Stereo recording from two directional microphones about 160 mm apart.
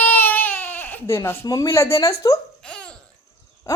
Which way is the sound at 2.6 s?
5° left (ahead or behind).